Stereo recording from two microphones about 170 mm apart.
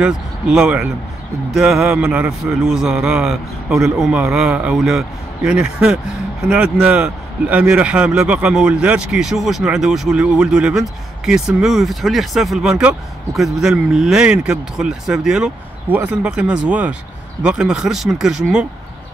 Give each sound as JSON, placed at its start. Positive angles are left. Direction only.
{"t": 0.0, "sound": "speech", "side_deg": -5}